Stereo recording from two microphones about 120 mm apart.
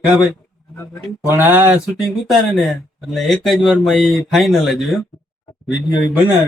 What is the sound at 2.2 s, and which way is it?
Speech, centre (ahead or behind).